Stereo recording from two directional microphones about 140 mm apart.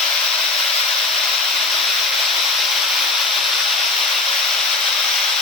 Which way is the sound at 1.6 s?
Centre (ahead or behind).